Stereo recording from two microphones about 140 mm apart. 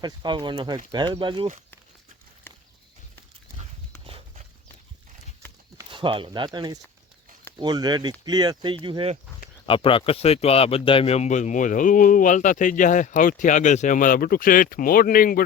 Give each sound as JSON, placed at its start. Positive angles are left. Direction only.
{"t": 0.0, "sound": "speech", "side_deg": -30}
{"t": 4.0, "sound": "horse", "side_deg": -40}
{"t": 5.4, "sound": "clip-clop", "side_deg": 15}
{"t": 5.9, "sound": "speech", "side_deg": -35}
{"t": 9.6, "sound": "a man's voice", "side_deg": 40}